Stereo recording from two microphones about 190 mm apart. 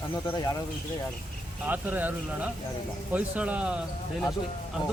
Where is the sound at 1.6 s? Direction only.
10° right (ahead or behind).